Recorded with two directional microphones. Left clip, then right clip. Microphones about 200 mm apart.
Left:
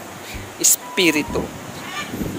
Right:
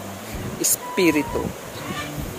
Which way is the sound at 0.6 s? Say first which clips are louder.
Left 3 dB; 10° right (ahead or behind).